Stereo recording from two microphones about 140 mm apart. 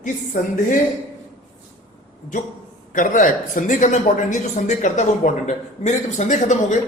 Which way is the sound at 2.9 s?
70° left (ahead or behind).